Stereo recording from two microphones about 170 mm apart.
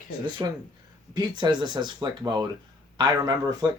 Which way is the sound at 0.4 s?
25° right (ahead or behind).